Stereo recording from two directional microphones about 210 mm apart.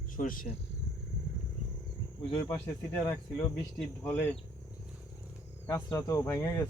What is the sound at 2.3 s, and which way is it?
Speech, 20° left (ahead or behind).